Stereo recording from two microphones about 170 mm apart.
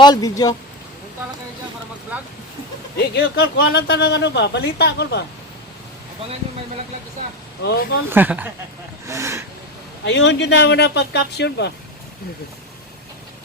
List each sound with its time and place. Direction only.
0.0 s speech: 20° left (ahead or behind)
3.0 s speech: 70° left (ahead or behind)
7.6 s speech: 85° left
8.1 s speech: 10° right (ahead or behind)
10.0 s speech: 90° left